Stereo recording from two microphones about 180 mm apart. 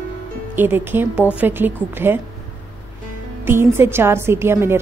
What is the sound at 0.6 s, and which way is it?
A woman's voice, 10° right (ahead or behind).